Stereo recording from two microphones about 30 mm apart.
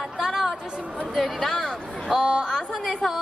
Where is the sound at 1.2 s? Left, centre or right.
Centre.